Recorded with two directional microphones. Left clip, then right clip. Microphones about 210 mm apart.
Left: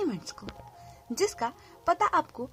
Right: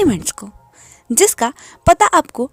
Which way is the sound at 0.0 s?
45° right (ahead or behind).